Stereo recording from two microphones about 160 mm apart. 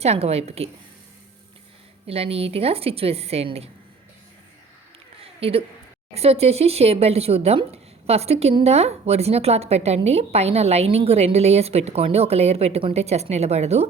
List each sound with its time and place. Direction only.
0.0 s speech: 40° right (ahead or behind)
2.0 s speech: 40° right (ahead or behind)
5.2 s a sound: 35° right (ahead or behind)
6.1 s speech: 40° right (ahead or behind)